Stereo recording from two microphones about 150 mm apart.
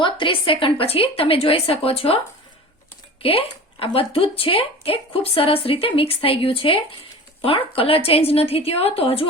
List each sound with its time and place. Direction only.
0.0 s speech: 35° left (ahead or behind)
3.2 s speech: 40° left (ahead or behind)